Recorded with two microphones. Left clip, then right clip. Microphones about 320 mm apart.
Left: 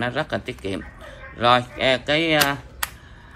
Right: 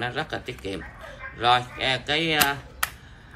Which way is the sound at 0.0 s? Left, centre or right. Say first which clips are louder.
Left 4 dB; centre.